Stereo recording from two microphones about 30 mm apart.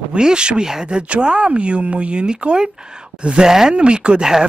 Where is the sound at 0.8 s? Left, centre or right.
Right.